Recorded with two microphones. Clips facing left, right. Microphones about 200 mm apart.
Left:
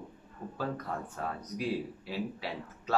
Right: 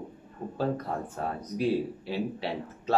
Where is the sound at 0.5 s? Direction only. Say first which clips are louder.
Right 6 dB; 30° right (ahead or behind).